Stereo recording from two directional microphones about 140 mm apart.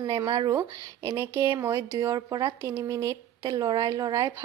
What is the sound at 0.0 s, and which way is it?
A woman's voice, 30° right (ahead or behind).